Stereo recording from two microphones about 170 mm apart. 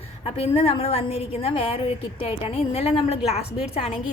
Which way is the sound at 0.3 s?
35° left (ahead or behind).